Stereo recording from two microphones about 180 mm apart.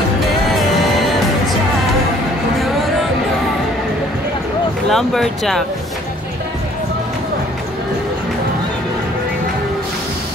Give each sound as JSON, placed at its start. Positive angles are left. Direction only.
{"t": 4.8, "sound": "speech", "side_deg": 0}